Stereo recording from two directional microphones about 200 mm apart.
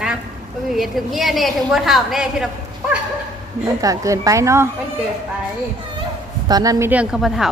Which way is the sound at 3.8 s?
15° right (ahead or behind).